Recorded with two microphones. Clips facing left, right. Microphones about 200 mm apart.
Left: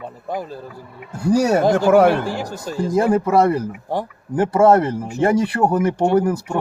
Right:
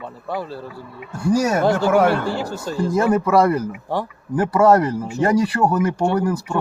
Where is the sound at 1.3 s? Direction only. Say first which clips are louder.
Left 2 dB; 35° left (ahead or behind).